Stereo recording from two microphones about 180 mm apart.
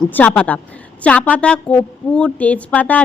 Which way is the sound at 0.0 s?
10° left (ahead or behind).